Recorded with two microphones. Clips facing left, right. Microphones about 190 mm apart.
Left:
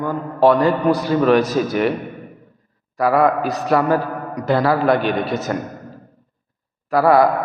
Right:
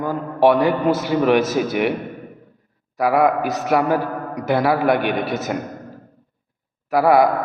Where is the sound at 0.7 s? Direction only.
20° right (ahead or behind).